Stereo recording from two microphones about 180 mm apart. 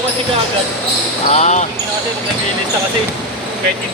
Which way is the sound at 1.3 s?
40° left (ahead or behind).